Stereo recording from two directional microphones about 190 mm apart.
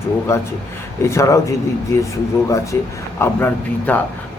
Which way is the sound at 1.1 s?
15° left (ahead or behind).